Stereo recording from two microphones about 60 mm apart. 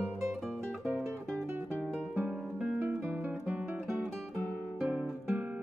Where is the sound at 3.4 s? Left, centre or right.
Centre.